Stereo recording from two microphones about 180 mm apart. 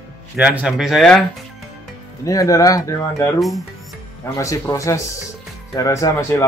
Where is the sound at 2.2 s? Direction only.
20° left (ahead or behind).